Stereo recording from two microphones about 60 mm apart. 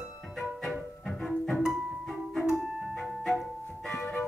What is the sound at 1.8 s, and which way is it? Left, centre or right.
Music, centre.